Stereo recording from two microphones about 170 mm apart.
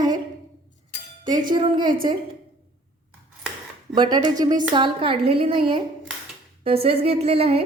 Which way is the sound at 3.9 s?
25° right (ahead or behind).